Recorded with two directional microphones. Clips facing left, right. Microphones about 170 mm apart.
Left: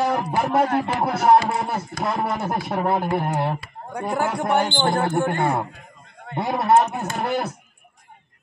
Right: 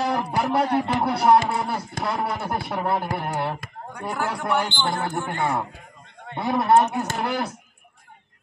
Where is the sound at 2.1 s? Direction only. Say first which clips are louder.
Left 2 dB; 20° left (ahead or behind).